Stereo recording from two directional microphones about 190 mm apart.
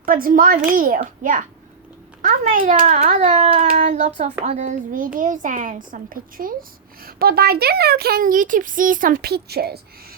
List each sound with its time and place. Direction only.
0.0 s a child's voice: 50° right (ahead or behind)